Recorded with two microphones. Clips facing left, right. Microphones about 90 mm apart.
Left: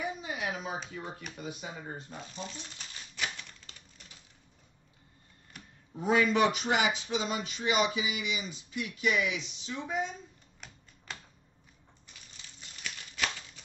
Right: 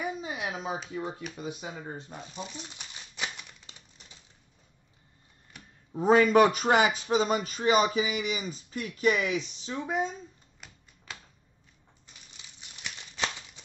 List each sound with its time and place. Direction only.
0.4 s a sound: 25° right (ahead or behind)
0.9 s speech: 25° right (ahead or behind)
1.9 s crumpling: 20° right (ahead or behind)
5.9 s speech: 45° right (ahead or behind)
10.6 s finger snapping: 5° right (ahead or behind)
12.4 s crumpling: 20° right (ahead or behind)